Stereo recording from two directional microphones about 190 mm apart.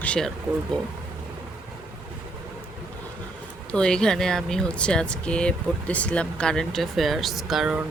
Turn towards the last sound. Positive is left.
turn(degrees=-5)  # may be behind; listen again after turning